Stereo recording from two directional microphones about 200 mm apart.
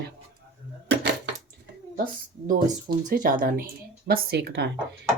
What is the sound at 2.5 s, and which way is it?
Speech, 20° right (ahead or behind).